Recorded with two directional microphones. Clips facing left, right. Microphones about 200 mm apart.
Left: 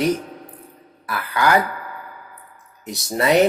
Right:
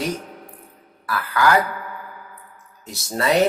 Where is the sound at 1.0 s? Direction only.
20° left (ahead or behind).